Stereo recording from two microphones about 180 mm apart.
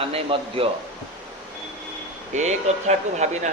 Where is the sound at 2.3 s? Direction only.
40° right (ahead or behind).